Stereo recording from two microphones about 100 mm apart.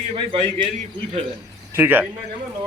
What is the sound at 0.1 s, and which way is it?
Speech, 65° right (ahead or behind).